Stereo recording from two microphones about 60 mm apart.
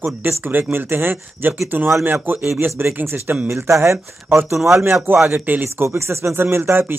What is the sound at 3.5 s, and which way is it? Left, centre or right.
Speech, right.